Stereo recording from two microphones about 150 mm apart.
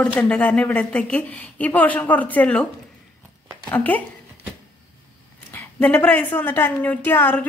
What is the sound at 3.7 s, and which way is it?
Speech, 10° left (ahead or behind).